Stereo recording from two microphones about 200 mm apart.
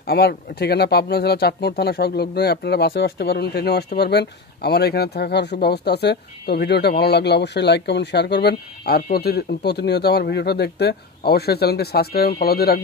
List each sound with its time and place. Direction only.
0.0 s speech: 50° left (ahead or behind)